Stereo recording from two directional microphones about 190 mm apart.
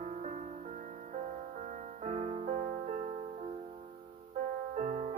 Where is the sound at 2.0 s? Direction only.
35° right (ahead or behind).